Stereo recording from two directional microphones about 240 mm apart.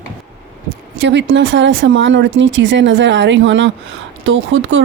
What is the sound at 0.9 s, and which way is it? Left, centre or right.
Speech, right.